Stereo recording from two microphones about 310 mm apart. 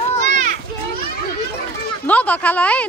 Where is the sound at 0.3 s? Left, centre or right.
Right.